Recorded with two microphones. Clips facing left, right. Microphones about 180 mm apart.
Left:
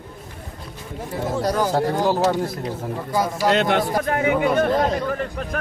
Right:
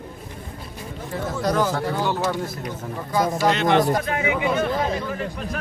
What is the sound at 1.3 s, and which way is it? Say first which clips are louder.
Speech: left 2 dB; 35° left (ahead or behind).